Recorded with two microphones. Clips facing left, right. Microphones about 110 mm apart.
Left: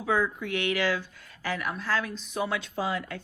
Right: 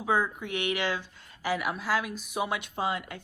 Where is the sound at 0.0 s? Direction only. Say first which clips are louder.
Left 1 dB; 20° right (ahead or behind).